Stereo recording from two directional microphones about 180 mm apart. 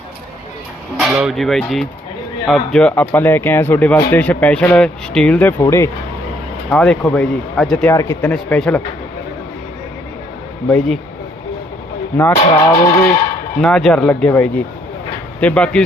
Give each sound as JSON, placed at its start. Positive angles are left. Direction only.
{"t": 0.9, "sound": "speech", "side_deg": -5}
{"t": 6.7, "sound": "speech", "side_deg": 5}
{"t": 7.9, "sound": "speech", "side_deg": 15}
{"t": 12.4, "sound": "speech", "side_deg": 25}
{"t": 13.6, "sound": "speech", "side_deg": 5}